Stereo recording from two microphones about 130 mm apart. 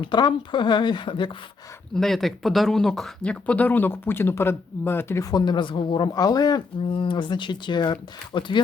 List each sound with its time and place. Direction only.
0.0 s speech: 35° left (ahead or behind)
2.0 s speech: centre (ahead or behind); by 8.6 s 40° left (ahead or behind)